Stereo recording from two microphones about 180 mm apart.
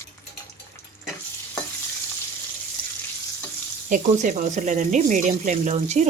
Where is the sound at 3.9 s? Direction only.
45° right (ahead or behind).